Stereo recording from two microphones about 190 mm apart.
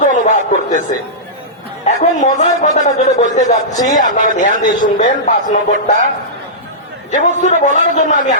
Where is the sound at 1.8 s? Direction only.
35° left (ahead or behind).